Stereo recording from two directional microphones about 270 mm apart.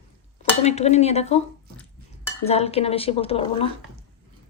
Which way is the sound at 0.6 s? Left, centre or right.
Left.